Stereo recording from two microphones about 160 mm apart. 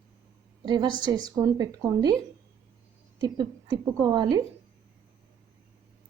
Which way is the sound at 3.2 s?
25° right (ahead or behind).